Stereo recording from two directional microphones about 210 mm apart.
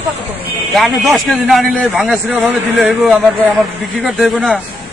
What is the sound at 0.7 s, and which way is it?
A man's voice, centre (ahead or behind).